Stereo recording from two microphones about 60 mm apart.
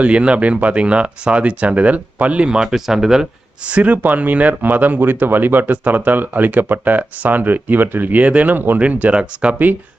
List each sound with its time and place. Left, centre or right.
0.0 s speech: centre
3.7 s speech: right
8.8 s speech: right